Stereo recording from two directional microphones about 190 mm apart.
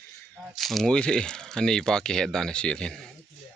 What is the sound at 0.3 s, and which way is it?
Speech, centre (ahead or behind).